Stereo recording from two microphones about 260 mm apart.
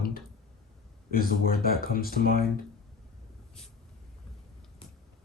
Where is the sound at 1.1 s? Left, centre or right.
Left.